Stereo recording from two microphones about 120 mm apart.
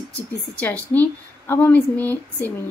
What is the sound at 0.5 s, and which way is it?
A woman's voice, 15° left (ahead or behind).